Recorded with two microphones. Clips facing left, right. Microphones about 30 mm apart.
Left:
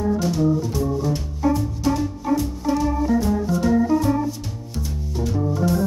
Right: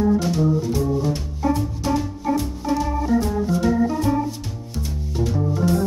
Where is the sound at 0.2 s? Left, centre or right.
Centre.